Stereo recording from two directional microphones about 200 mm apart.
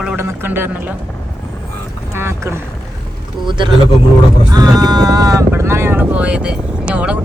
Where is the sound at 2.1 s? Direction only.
15° right (ahead or behind).